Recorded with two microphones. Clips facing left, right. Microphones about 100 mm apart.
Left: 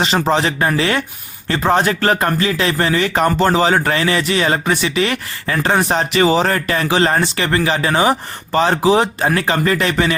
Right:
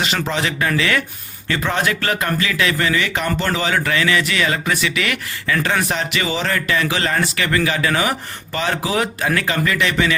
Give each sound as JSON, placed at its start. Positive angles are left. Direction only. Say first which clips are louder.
{"t": 0.0, "sound": "speech", "louder": "left 6 dB", "side_deg": 35}